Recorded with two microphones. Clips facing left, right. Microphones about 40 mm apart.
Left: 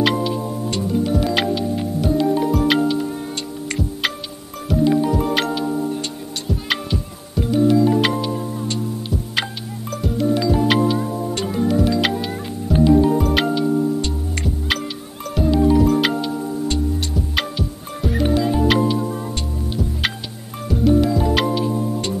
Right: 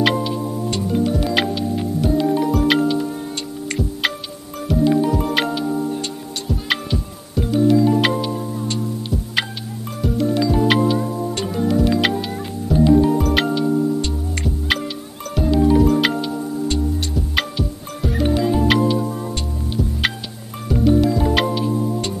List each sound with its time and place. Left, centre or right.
0.0 s music: centre
20.6 s music: centre